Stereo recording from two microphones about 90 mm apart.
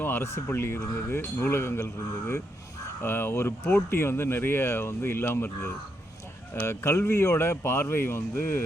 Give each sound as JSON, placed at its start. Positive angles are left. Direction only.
{"t": 0.0, "sound": "speech", "side_deg": 25}